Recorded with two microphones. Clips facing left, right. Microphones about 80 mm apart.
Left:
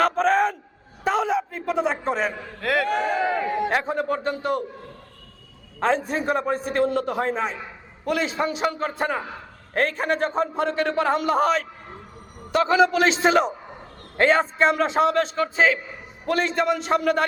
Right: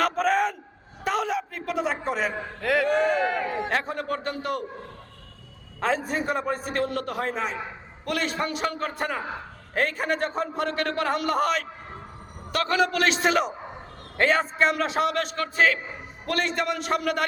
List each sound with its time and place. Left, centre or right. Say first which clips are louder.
0.0 s a sound: left 3 dB; centre
3.1 s a man's voice: left 2 dB; centre
5.8 s a man's voice: left 3 dB; centre